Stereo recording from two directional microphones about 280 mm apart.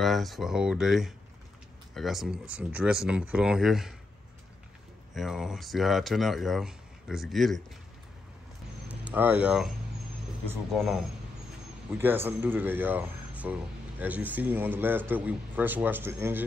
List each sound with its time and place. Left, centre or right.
0.0 s speech: centre
5.1 s speech: centre
8.8 s speech: centre
12.0 s speech: centre